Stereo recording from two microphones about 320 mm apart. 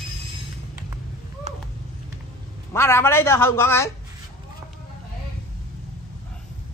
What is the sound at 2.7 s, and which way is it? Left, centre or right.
Speech, centre.